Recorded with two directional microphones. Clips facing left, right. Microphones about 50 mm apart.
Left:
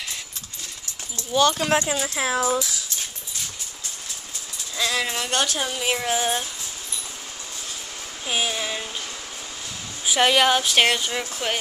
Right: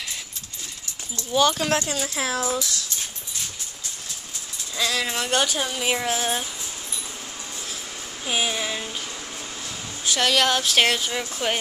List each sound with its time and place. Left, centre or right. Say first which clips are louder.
1.3 s speech: left 1 dB; centre
4.7 s speech: even; centre
8.3 s speech: even; centre
10.0 s speech: left 3 dB; centre